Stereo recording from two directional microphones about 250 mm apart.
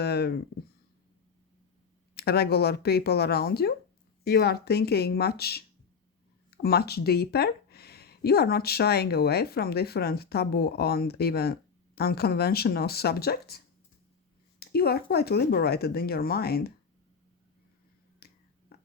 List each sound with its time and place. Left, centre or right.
0.0 s speech: left
2.1 s speech: left
14.6 s speech: left
18.2 s finger snapping: left